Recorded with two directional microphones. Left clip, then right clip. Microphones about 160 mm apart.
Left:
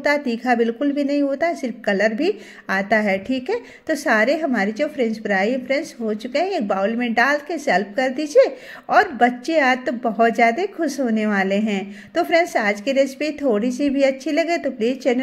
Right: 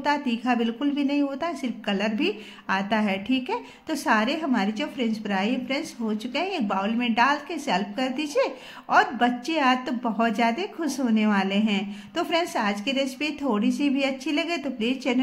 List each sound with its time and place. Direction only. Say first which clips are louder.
0.0 s a woman's voice: left 5 dB; 25° left (ahead or behind)